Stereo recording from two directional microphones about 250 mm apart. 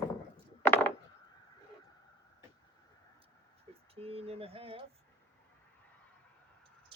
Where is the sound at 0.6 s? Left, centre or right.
Centre.